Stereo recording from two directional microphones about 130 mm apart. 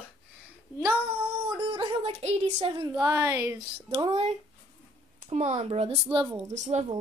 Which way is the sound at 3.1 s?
20° right (ahead or behind).